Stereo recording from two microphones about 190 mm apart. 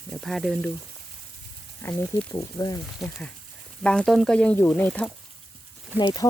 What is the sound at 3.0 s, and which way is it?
Speech, 5° left (ahead or behind).